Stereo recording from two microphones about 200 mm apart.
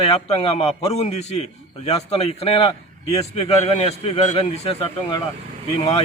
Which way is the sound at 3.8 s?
30° left (ahead or behind).